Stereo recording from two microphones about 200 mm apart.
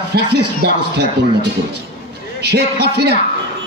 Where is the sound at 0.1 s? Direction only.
55° right (ahead or behind).